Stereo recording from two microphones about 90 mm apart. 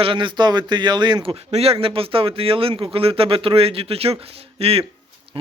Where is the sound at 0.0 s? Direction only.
70° right (ahead or behind); by 4.9 s 90° right.